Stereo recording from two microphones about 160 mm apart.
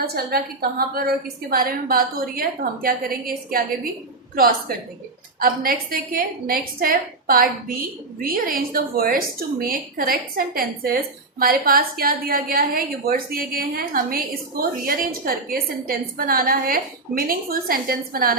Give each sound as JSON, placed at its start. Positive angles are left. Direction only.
{"t": 0.0, "sound": "a woman's voice", "side_deg": -75}
{"t": 5.4, "sound": "a woman's voice", "side_deg": -65}